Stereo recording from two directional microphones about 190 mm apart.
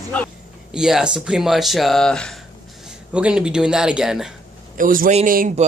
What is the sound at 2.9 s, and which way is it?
Speech, 5° right (ahead or behind).